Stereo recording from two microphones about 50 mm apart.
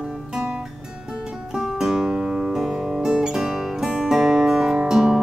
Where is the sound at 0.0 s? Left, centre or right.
Centre.